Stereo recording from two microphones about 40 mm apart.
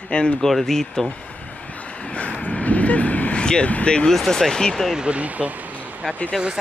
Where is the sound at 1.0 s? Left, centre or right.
Left.